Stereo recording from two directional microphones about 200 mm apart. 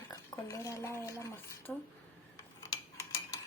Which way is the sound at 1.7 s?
Centre (ahead or behind).